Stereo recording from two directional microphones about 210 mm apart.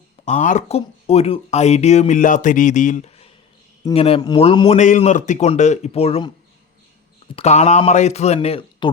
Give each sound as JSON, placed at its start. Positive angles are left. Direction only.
{"t": 0.3, "sound": "a man's voice", "side_deg": 35}
{"t": 7.3, "sound": "speech", "side_deg": 30}